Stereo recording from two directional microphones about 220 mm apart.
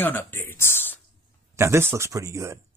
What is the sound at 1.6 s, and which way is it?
Speech, 10° right (ahead or behind).